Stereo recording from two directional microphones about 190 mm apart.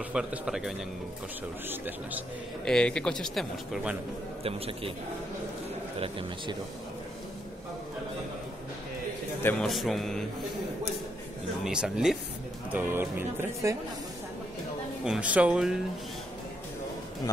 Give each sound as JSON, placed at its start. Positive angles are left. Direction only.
{"t": 0.1, "sound": "speech", "side_deg": -5}
{"t": 2.6, "sound": "speech", "side_deg": 5}
{"t": 4.4, "sound": "a man's voice", "side_deg": -30}
{"t": 5.9, "sound": "a man's voice", "side_deg": -30}
{"t": 9.4, "sound": "a man's voice", "side_deg": 10}
{"t": 9.7, "sound": "speech", "side_deg": 0}
{"t": 11.6, "sound": "speech", "side_deg": -5}
{"t": 15.0, "sound": "speech", "side_deg": -5}